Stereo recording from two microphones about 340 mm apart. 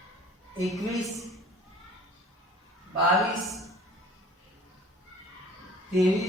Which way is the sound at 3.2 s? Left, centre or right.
Centre.